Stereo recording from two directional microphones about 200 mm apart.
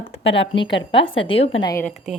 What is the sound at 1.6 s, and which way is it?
Speech, 15° left (ahead or behind).